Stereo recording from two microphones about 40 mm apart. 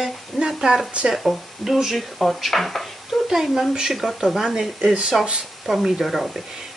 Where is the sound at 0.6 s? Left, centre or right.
Right.